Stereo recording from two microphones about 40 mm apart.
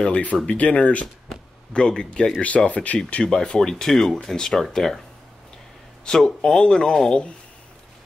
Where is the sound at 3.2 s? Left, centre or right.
Left.